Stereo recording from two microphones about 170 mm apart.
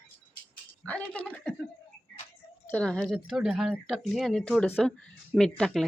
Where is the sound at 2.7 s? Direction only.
5° left (ahead or behind).